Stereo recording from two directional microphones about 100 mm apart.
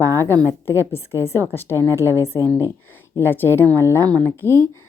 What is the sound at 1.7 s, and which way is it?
Speech, 30° right (ahead or behind).